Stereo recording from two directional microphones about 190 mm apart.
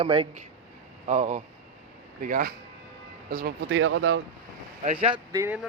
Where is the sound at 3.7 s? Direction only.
90° right.